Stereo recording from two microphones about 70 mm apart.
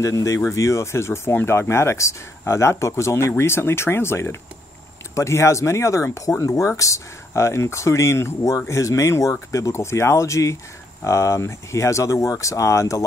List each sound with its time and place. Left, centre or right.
0.0 s speech: left